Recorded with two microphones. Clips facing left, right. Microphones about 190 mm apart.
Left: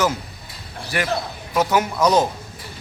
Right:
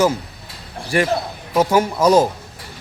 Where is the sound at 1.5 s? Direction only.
30° right (ahead or behind).